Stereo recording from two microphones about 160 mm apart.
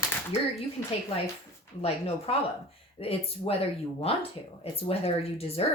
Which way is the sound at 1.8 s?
40° left (ahead or behind).